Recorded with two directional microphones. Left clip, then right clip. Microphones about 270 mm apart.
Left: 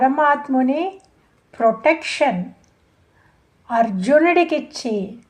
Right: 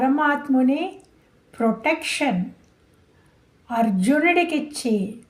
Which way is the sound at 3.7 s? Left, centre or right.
Left.